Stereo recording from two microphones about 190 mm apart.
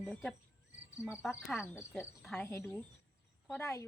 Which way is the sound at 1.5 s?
15° left (ahead or behind).